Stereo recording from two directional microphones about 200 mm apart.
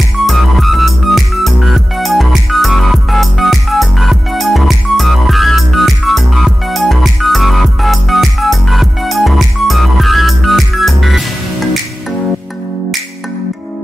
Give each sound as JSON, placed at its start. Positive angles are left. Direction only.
{"t": 0.3, "sound": "music", "side_deg": 0}